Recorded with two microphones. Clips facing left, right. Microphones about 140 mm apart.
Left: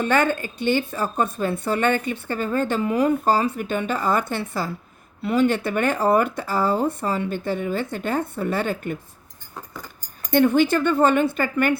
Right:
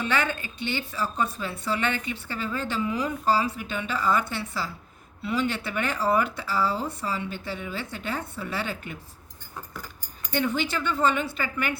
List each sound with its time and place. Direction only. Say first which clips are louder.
0.0 s a woman's voice: left 7 dB; 50° left (ahead or behind)
10.3 s a woman's voice: left 10 dB; 50° left (ahead or behind)